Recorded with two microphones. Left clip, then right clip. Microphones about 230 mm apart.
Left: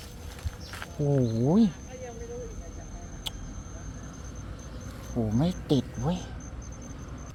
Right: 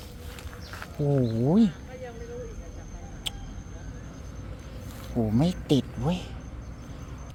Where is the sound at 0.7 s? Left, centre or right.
Centre.